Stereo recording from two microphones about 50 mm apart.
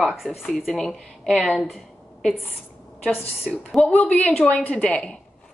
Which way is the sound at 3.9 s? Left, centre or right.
Left.